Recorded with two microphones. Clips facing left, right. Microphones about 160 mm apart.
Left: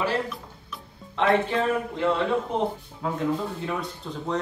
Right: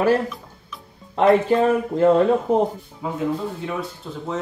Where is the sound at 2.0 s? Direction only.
45° right (ahead or behind).